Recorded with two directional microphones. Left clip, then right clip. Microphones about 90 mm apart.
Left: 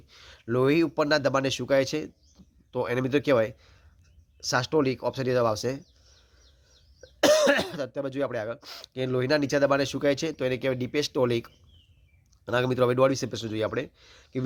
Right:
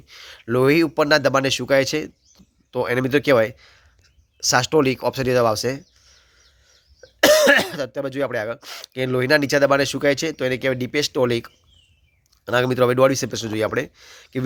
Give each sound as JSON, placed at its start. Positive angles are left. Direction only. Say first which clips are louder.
{"t": 0.1, "sound": "speech", "louder": "right 6 dB", "side_deg": -35}
{"t": 7.2, "sound": "speech", "louder": "right 7 dB", "side_deg": -20}